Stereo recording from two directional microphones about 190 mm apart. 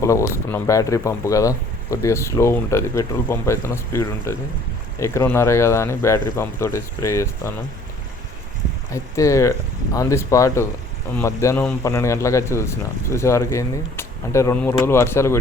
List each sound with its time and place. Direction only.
0.0 s speech: 15° left (ahead or behind)
8.9 s speech: 15° left (ahead or behind)